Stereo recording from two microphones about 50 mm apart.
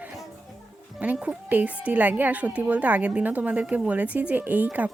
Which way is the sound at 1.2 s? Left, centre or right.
Right.